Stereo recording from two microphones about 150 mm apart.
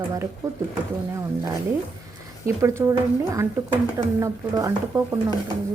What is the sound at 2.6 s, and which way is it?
Speech, 20° right (ahead or behind).